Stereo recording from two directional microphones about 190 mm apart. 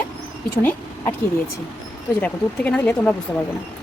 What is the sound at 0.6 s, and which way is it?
Speech, 10° left (ahead or behind).